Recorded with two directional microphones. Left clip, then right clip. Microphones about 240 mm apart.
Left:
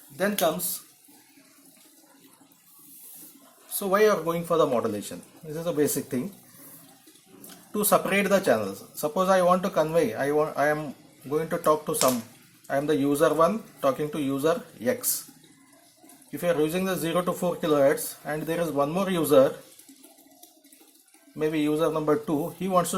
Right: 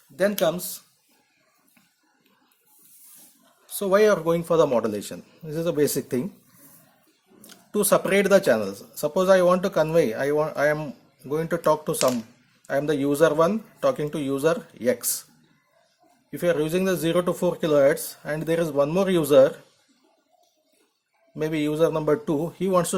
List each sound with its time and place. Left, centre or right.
0.2 s speech: right
3.7 s speech: right
7.4 s speech: right
16.3 s speech: right
21.3 s speech: right